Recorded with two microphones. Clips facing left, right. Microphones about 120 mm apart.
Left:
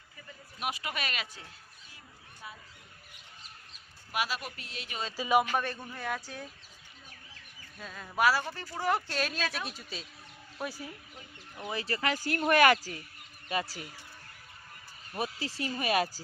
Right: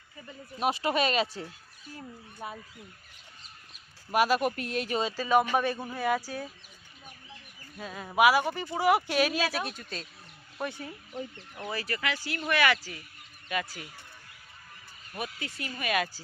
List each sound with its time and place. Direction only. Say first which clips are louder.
0.6 s speech: right 9 dB; 30° right (ahead or behind)
2.4 s speech: right 8 dB; 55° right (ahead or behind)
4.1 s speech: right 10 dB; 50° right (ahead or behind)
5.1 s speech: right 1 dB; 10° left (ahead or behind)
5.5 s speech: right 5 dB; 10° right (ahead or behind)
7.8 s speech: right 5 dB; 5° right (ahead or behind)
11.6 s speech: right 1 dB; 20° left (ahead or behind)
11.9 s speech: left 3 dB; 30° left (ahead or behind)
12.1 s speech: left 6 dB; 45° left (ahead or behind)
13.5 s speech: even; 30° left (ahead or behind)
15.1 s speech: left 2 dB; 30° left (ahead or behind)